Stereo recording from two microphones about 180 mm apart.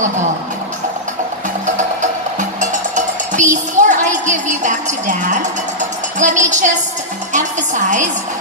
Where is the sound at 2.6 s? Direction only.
45° right (ahead or behind).